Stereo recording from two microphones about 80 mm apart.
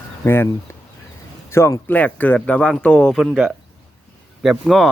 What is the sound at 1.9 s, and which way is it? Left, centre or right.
Speech, left.